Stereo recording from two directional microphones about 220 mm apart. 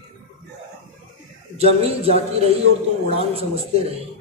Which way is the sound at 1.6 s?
25° right (ahead or behind).